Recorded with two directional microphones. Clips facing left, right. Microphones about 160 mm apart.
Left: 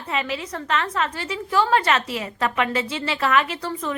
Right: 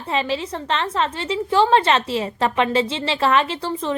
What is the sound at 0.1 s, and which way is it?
A woman's voice, 30° right (ahead or behind).